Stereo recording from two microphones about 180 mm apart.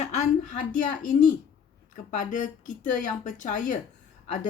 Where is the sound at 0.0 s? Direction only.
40° left (ahead or behind).